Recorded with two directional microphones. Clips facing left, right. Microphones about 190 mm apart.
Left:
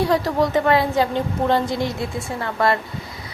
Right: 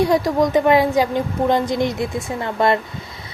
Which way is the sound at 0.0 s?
15° right (ahead or behind).